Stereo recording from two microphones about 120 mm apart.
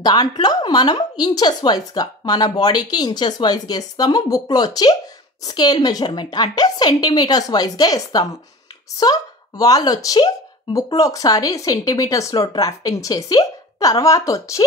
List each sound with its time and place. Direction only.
0.0 s a woman's voice: 35° left (ahead or behind)